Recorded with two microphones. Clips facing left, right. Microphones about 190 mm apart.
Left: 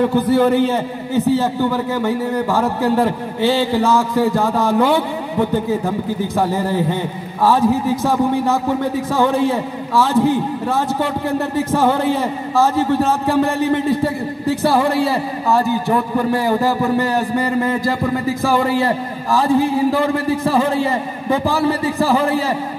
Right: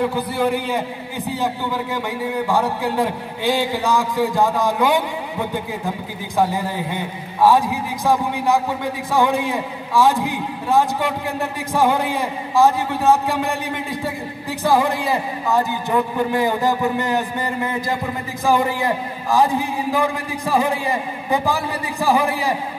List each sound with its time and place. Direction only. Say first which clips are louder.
0.3 s a man's voice: left 7 dB; 10° right (ahead or behind)
3.0 s a man's voice: left 5 dB; 15° right (ahead or behind)
6.3 s a man's voice: left 1 dB; 15° right (ahead or behind)
17.0 s a sound: left 4 dB; 20° right (ahead or behind)
18.4 s a man's voice: even; 15° right (ahead or behind)